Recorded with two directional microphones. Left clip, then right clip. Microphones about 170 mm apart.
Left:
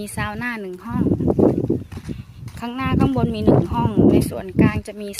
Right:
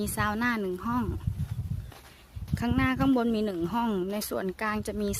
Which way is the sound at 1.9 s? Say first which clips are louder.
Left 13 dB; 80° left.